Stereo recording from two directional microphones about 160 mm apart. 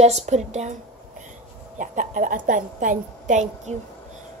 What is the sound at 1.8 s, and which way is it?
A woman's voice, 55° right (ahead or behind).